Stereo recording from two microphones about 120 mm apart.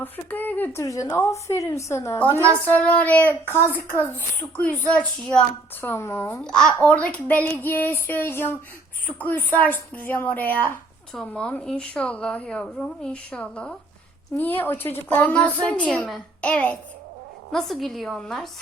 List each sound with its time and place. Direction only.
0.0 s a woman's voice: 15° left (ahead or behind)
2.6 s a child's voice: 15° left (ahead or behind)
6.4 s a child's voice: 5° left (ahead or behind)